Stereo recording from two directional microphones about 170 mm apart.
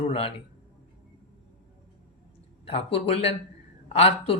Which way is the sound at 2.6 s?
35° left (ahead or behind).